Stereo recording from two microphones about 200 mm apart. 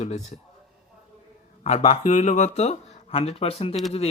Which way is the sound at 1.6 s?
35° left (ahead or behind).